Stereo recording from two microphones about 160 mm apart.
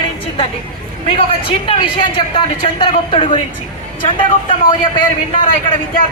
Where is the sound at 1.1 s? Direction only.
35° left (ahead or behind).